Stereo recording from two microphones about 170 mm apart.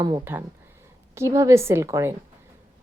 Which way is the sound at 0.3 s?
10° right (ahead or behind).